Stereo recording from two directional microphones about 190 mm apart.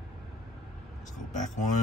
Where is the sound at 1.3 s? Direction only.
40° left (ahead or behind).